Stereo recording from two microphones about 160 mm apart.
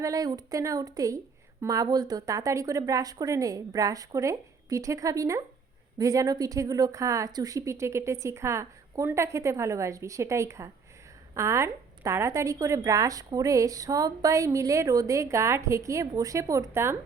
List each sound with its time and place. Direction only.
0.0 s a woman's voice: 20° right (ahead or behind)